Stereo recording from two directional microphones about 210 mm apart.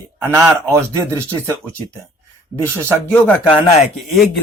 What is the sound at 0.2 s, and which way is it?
Speech, 15° right (ahead or behind).